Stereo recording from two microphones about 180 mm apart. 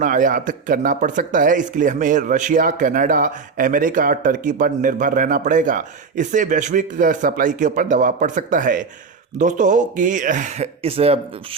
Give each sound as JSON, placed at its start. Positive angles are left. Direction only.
{"t": 0.0, "sound": "speech", "side_deg": -45}